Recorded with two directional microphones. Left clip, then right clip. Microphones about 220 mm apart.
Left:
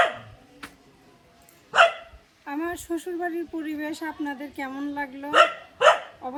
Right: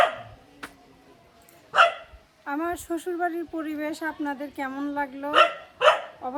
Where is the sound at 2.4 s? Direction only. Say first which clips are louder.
Right 1 dB; 15° right (ahead or behind).